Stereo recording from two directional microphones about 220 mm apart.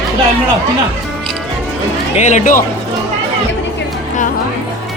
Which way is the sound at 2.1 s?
35° left (ahead or behind).